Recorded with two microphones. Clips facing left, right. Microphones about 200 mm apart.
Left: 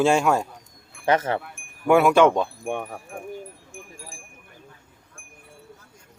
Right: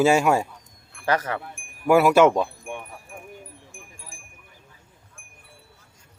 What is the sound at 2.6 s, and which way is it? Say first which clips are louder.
Speech: left 7 dB; 60° left (ahead or behind).